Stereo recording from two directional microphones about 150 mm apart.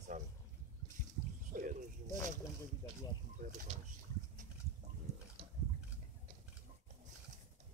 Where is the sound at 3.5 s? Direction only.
55° right (ahead or behind).